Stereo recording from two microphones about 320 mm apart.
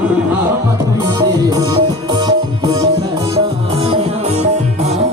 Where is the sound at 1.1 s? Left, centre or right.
Centre.